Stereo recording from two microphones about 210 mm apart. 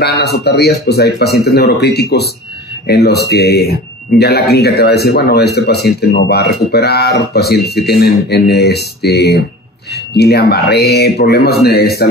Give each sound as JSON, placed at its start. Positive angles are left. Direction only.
{"t": 0.0, "sound": "speech", "side_deg": 50}